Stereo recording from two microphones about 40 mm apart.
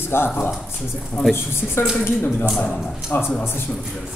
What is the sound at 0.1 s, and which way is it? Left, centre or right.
Speech, left.